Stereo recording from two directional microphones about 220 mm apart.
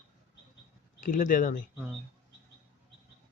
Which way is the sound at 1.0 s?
40° left (ahead or behind).